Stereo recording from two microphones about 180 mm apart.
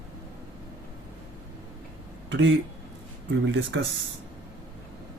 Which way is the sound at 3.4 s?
90° right.